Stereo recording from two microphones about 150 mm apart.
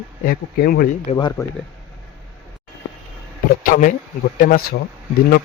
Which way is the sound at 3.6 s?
60° left (ahead or behind).